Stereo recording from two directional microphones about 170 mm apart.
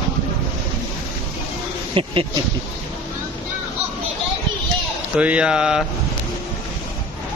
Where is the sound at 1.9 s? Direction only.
30° right (ahead or behind).